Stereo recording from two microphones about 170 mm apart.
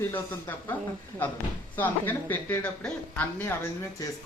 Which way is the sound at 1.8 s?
10° left (ahead or behind).